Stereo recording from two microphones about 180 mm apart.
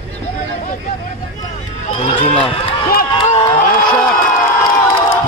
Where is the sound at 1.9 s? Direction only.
35° left (ahead or behind).